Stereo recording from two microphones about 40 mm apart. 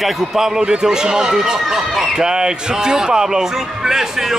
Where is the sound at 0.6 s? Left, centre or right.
Centre.